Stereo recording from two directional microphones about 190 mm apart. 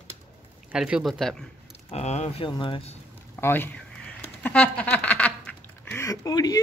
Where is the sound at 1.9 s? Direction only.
35° left (ahead or behind).